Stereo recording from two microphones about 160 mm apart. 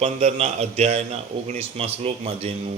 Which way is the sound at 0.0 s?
40° right (ahead or behind).